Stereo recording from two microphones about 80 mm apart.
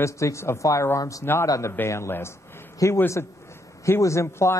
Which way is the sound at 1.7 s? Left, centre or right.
Left.